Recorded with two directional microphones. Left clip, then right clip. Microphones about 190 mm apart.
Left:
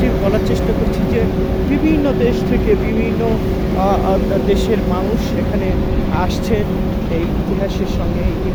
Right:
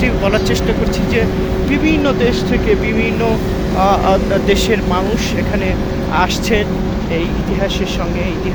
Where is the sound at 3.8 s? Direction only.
5° left (ahead or behind).